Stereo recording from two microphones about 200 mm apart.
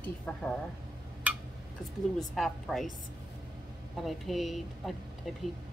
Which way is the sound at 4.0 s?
Centre (ahead or behind).